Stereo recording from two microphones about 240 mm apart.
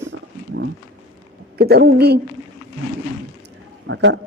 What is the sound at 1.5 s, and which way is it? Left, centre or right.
Speech, right.